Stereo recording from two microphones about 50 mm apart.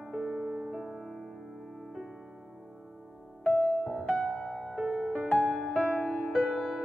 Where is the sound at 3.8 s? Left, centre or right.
Right.